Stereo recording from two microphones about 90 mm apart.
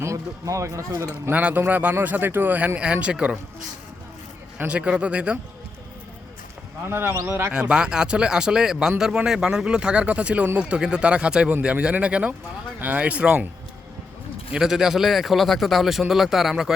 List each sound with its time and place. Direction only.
0.0 s speech: 35° right (ahead or behind)
1.3 s speech: 15° right (ahead or behind)
4.5 s speech: 10° right (ahead or behind)
6.8 s speech: 25° right (ahead or behind)
7.5 s speech: 10° right (ahead or behind)
14.5 s a man's voice: 5° right (ahead or behind)